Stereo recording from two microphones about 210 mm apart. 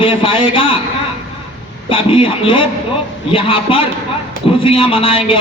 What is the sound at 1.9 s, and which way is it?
A man's voice, 25° left (ahead or behind).